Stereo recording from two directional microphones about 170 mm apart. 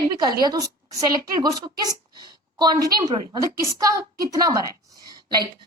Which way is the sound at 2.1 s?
25° right (ahead or behind).